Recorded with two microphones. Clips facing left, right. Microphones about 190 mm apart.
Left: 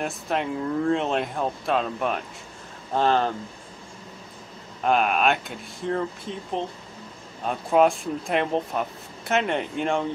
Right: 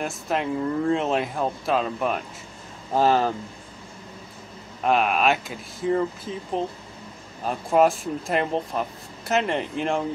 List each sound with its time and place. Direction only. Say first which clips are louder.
0.0 s speech: right 1 dB; centre (ahead or behind)
4.8 s speech: right 1 dB; centre (ahead or behind)